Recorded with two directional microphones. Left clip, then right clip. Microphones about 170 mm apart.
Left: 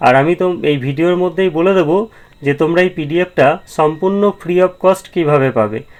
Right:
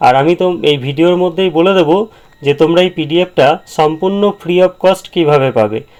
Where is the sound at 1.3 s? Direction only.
30° right (ahead or behind).